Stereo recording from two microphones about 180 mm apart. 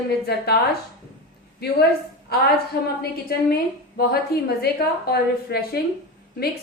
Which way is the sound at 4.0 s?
60° left (ahead or behind).